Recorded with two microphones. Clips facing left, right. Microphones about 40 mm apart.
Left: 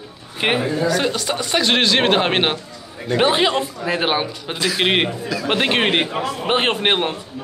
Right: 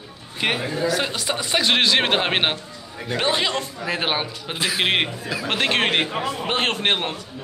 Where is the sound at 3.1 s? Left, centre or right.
Centre.